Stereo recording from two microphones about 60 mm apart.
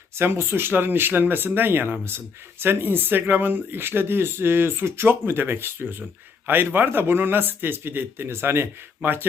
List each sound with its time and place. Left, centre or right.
0.2 s speech: right